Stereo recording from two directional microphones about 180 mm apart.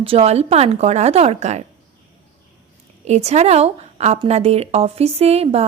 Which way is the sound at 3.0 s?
40° right (ahead or behind).